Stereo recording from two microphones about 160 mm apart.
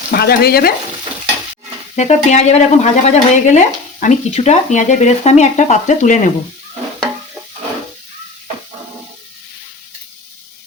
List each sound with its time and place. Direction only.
0.1 s speech: 80° left
2.0 s speech: 45° left (ahead or behind)